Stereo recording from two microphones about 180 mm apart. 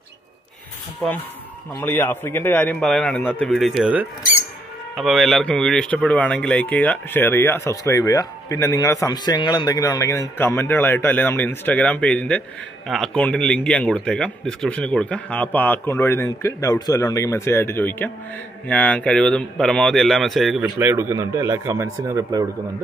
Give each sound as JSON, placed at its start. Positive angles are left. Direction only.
{"t": 1.8, "sound": "a man's voice", "side_deg": 15}
{"t": 20.8, "sound": "speech", "side_deg": -15}